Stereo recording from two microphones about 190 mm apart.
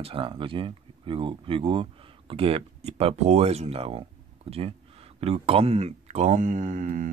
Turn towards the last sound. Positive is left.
turn(degrees=-40)  # may be behind; listen again after turning